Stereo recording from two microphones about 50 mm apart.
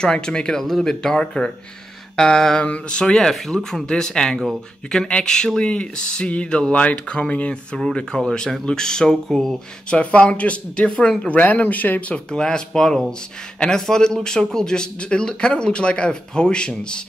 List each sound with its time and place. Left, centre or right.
0.0 s speech: centre
9.8 s speech: left
11.2 s speech: left
12.3 s speech: centre